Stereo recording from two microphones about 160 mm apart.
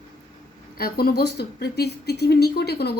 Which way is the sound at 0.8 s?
70° left (ahead or behind).